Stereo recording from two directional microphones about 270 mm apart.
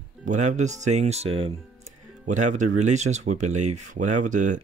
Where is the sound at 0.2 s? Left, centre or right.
Right.